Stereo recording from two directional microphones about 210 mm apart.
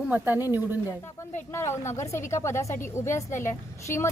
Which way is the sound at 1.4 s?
10° left (ahead or behind).